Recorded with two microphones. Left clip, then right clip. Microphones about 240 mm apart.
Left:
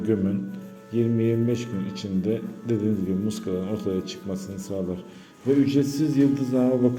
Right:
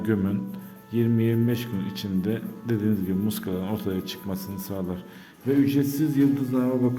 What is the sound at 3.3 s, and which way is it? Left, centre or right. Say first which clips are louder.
Speech: left 2 dB; centre.